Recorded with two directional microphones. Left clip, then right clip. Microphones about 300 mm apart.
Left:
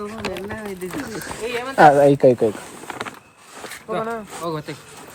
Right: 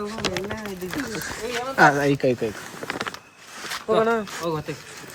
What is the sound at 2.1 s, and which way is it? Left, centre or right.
Speech, left.